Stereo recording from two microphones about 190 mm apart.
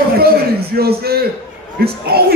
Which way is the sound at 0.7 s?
55° right (ahead or behind).